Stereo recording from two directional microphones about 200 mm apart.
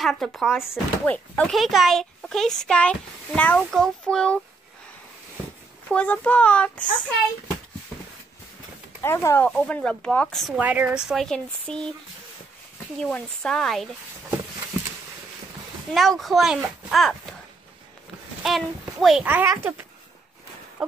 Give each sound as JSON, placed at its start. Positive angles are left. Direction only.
{"t": 0.0, "sound": "speech", "side_deg": 0}
{"t": 5.9, "sound": "a child's voice", "side_deg": 5}
{"t": 6.8, "sound": "speech", "side_deg": 40}
{"t": 9.0, "sound": "speech", "side_deg": 15}
{"t": 13.0, "sound": "speech", "side_deg": 5}
{"t": 15.9, "sound": "speech", "side_deg": 0}
{"t": 18.4, "sound": "a child's voice", "side_deg": 0}